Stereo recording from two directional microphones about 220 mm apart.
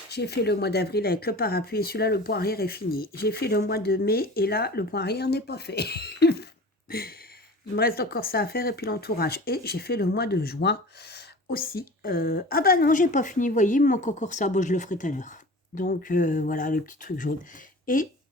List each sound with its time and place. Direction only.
0.1 s speech: 50° left (ahead or behind)
7.8 s speech: 45° left (ahead or behind)